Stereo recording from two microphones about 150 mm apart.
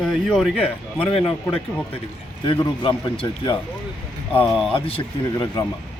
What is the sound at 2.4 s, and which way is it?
A man's voice, 35° left (ahead or behind).